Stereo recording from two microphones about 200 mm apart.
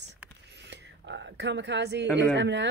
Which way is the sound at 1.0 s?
60° right (ahead or behind).